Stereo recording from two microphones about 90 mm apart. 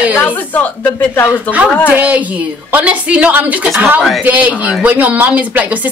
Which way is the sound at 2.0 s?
15° right (ahead or behind).